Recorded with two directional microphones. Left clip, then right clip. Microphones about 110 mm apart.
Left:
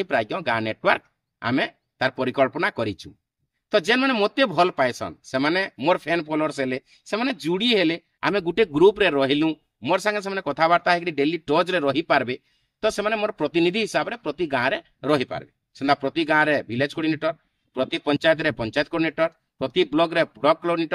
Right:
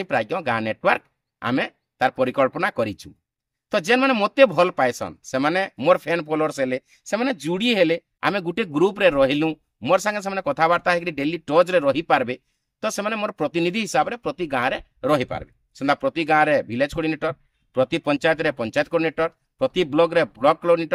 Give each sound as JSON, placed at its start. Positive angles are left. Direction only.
{"t": 0.0, "sound": "speech", "side_deg": -35}